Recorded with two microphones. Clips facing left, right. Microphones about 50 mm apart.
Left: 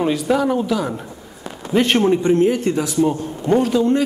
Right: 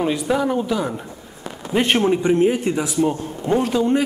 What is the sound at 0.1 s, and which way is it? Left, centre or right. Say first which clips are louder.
A man's voice: left 2 dB; centre.